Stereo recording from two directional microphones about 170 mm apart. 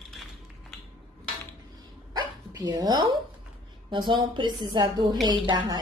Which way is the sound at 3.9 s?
30° right (ahead or behind).